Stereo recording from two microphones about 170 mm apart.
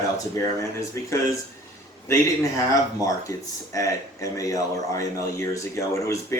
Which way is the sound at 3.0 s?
20° left (ahead or behind).